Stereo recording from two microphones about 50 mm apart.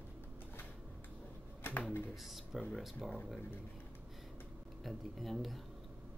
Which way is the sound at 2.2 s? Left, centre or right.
Centre.